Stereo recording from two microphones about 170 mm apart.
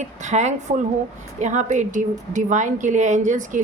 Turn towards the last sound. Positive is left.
turn(degrees=-45)  # may be behind; listen again after turning